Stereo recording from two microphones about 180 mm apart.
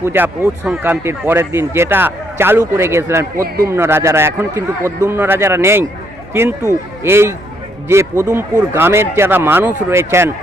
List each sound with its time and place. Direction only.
0.0 s speech: 15° right (ahead or behind)
3.3 s a man's voice: 50° right (ahead or behind)
3.7 s speech: 15° right (ahead or behind)